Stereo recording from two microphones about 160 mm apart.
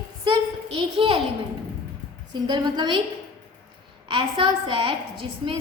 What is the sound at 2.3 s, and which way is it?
Speech, 25° right (ahead or behind).